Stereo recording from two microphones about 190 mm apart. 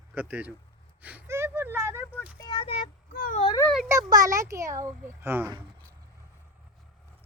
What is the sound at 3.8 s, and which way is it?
Speech, 15° right (ahead or behind).